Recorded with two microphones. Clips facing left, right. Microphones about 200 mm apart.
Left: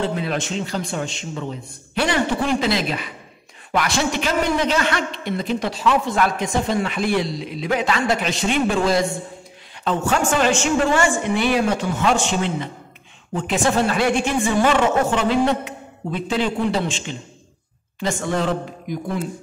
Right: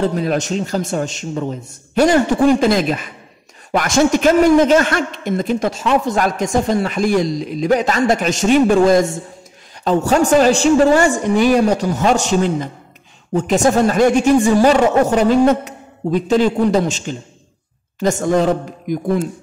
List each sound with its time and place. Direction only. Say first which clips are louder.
0.0 s a man's voice: right 6 dB; 40° right (ahead or behind)